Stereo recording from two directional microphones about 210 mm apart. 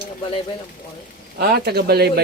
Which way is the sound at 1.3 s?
50° right (ahead or behind).